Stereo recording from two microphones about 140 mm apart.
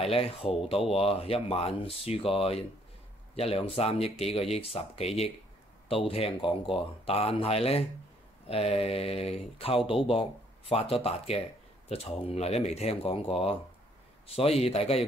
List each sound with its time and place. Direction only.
0.0 s a man's voice: 45° left (ahead or behind)